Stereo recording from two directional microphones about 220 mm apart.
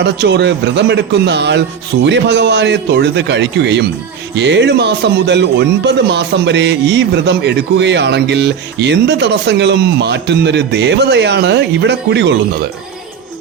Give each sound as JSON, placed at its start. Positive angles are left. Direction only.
{"t": 0.0, "sound": "a man's voice", "side_deg": -50}